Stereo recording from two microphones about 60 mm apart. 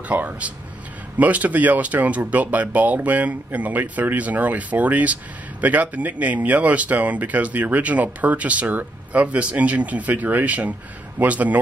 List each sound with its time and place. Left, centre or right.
0.1 s speech: right